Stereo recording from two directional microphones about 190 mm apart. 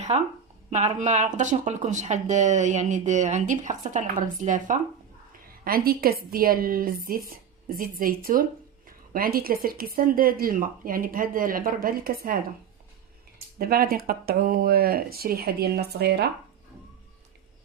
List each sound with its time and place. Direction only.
0.1 s speech: 35° right (ahead or behind)
13.6 s speech: 50° right (ahead or behind)